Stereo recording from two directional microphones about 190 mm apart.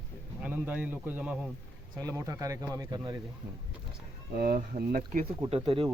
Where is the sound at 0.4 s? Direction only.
10° right (ahead or behind).